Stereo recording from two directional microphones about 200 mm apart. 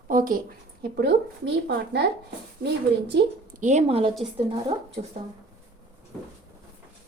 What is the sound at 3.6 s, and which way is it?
A woman's voice, 35° right (ahead or behind).